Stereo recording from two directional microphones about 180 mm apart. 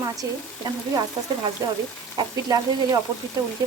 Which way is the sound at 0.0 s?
20° right (ahead or behind).